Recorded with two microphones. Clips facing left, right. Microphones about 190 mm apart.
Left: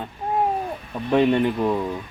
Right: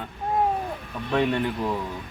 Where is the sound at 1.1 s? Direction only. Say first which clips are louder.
Left 6 dB; 20° left (ahead or behind).